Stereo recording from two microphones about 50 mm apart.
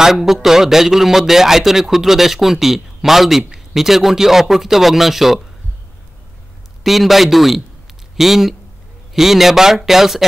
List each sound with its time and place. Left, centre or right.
0.0 s speech: centre
6.8 s a man's voice: centre